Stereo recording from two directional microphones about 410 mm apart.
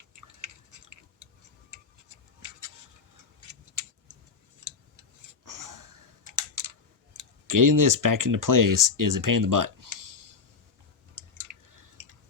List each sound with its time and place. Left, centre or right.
0.2 s chewing: right
1.7 s tick-tock: right
5.5 s wheeze: right
7.2 s speech: right
11.2 s chewing: right